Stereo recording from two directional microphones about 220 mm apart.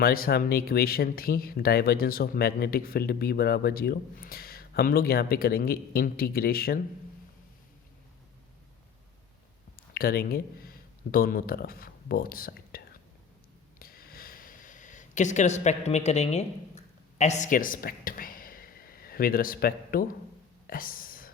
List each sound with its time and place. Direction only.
0.0 s speech: 45° left (ahead or behind)
9.9 s speech: 45° left (ahead or behind)
13.7 s a sound: 40° left (ahead or behind)
20.7 s whispering: 40° left (ahead or behind)